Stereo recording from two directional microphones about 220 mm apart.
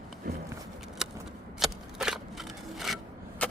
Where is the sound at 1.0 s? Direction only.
Centre (ahead or behind).